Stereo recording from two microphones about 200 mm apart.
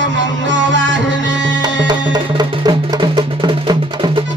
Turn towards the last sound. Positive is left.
turn(degrees=-20)  # may be behind; listen again after turning